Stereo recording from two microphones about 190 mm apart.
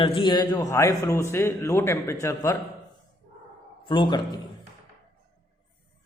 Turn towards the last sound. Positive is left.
turn(degrees=25)  # may be behind; listen again after turning